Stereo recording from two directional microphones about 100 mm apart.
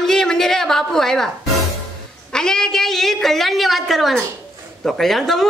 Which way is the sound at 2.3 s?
5° left (ahead or behind).